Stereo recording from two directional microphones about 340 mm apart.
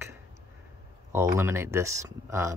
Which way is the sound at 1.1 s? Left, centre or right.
Centre.